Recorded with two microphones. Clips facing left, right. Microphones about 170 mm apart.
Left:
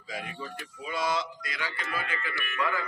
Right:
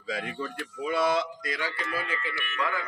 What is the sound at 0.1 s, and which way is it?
Speech, 60° right (ahead or behind).